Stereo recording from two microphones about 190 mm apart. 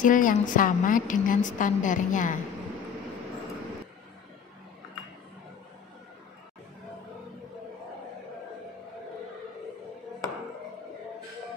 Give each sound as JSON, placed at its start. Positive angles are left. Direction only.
{"t": 0.0, "sound": "a woman's voice", "side_deg": 45}